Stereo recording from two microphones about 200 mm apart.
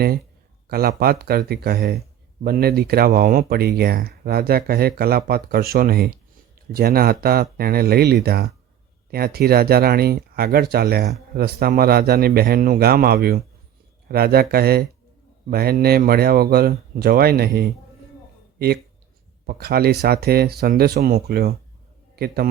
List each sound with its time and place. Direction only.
0.7 s speech: 50° right (ahead or behind)
19.5 s a man's voice: 50° right (ahead or behind)